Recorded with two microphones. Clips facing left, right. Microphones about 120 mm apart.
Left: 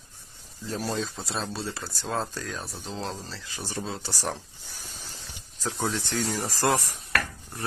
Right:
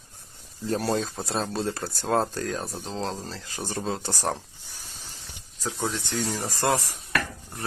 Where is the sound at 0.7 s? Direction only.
60° right (ahead or behind).